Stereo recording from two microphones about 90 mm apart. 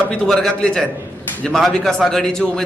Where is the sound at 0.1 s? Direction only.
5° left (ahead or behind).